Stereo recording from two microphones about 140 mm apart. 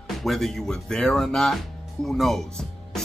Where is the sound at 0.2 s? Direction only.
Centre (ahead or behind).